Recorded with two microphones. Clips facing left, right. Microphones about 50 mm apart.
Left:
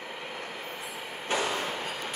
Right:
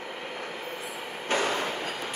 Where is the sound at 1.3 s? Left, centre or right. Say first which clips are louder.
Right 2 dB; right.